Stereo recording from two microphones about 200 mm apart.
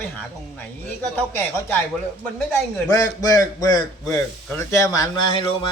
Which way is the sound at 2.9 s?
15° left (ahead or behind).